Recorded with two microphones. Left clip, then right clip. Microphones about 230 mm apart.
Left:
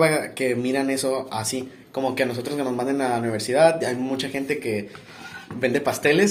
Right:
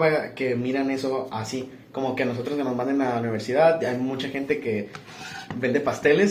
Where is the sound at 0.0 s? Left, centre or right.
Left.